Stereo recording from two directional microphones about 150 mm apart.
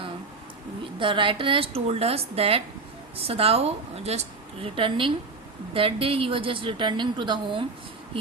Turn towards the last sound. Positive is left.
turn(degrees=-35)  # may be behind; listen again after turning